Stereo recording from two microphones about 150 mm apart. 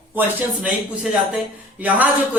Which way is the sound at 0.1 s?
10° right (ahead or behind).